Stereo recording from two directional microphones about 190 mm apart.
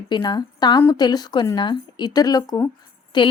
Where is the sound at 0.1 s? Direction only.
25° left (ahead or behind).